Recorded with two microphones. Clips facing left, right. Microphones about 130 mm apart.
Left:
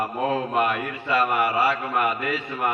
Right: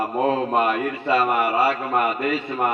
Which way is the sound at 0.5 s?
30° right (ahead or behind).